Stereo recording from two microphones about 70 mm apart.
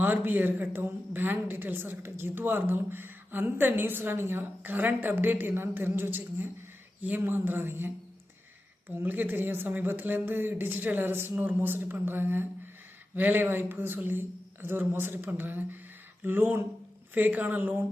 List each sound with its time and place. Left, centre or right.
0.0 s a woman's voice: right
9.0 s a woman's voice: right